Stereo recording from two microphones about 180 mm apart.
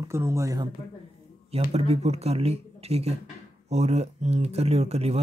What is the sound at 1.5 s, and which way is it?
Speech, 35° right (ahead or behind).